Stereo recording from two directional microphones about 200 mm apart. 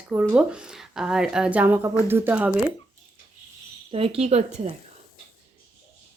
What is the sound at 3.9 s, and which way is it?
Speech, 30° right (ahead or behind).